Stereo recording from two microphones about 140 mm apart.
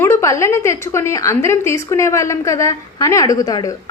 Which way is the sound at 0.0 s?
20° left (ahead or behind).